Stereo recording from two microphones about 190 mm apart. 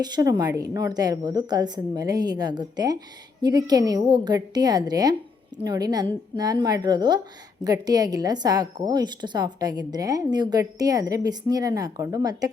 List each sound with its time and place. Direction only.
0.0 s a woman's voice: 20° right (ahead or behind)